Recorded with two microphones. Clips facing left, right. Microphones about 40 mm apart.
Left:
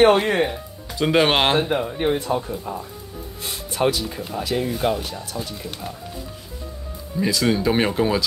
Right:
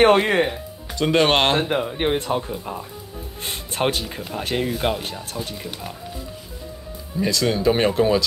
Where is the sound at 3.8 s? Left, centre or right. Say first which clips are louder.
Left 2 dB; right.